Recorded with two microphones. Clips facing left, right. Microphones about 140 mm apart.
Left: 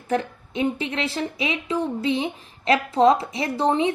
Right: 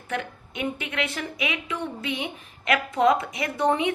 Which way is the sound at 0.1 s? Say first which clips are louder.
Left 7 dB; 30° left (ahead or behind).